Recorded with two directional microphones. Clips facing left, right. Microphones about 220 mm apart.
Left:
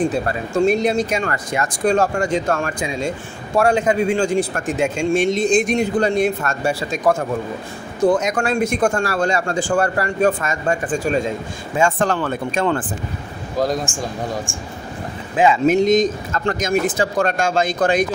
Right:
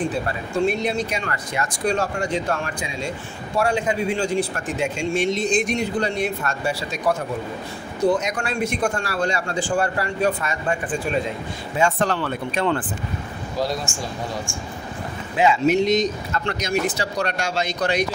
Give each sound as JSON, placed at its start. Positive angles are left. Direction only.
{"t": 0.6, "sound": "speech", "side_deg": 45}
{"t": 15.3, "sound": "speech", "side_deg": 50}